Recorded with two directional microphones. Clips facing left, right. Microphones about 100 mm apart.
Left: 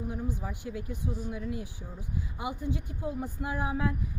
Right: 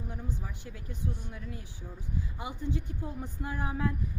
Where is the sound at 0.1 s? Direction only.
10° left (ahead or behind).